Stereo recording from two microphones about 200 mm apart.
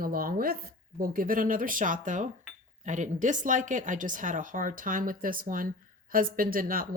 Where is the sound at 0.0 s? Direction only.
45° right (ahead or behind).